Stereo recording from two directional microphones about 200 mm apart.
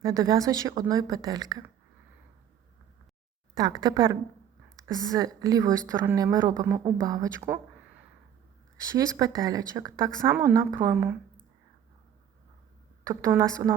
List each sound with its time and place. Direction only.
0.0 s a woman's voice: 15° right (ahead or behind)
3.5 s a woman's voice: 20° right (ahead or behind)
13.1 s a woman's voice: 15° right (ahead or behind)